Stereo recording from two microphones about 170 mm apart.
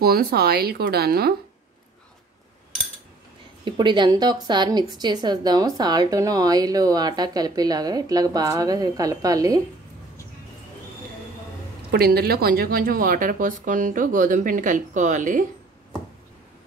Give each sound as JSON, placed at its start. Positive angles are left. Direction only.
{"t": 0.0, "sound": "speech", "side_deg": -65}
{"t": 3.6, "sound": "a woman's voice", "side_deg": -25}
{"t": 11.9, "sound": "speech", "side_deg": -65}